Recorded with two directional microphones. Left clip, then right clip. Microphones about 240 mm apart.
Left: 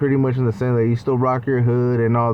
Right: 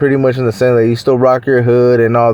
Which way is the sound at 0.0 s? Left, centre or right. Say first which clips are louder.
Right 8 dB; right.